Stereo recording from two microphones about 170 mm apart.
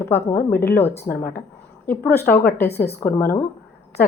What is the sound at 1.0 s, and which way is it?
Speech, 60° left (ahead or behind).